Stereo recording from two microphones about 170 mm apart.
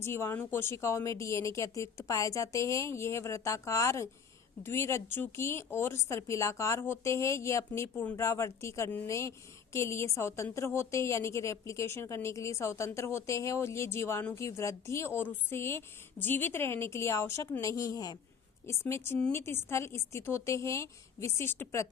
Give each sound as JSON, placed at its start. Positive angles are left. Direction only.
{"t": 0.0, "sound": "a woman's voice", "side_deg": 15}